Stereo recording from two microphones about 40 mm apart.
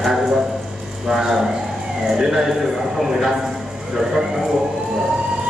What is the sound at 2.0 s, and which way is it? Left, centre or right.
Police car, centre.